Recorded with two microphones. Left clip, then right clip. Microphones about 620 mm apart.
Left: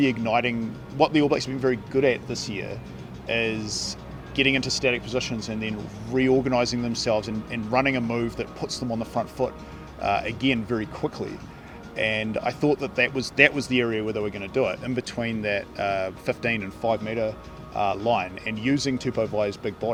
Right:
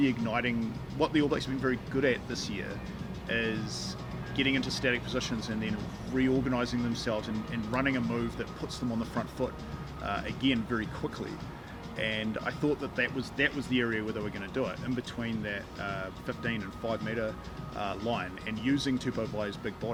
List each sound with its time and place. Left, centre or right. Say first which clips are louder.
0.0 s speech: left 7 dB; left
10.0 s speech: left 9 dB; left
11.9 s speech: left 8 dB; left